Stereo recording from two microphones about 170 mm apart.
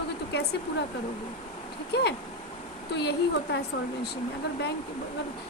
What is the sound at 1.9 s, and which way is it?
A woman's voice, 75° left (ahead or behind).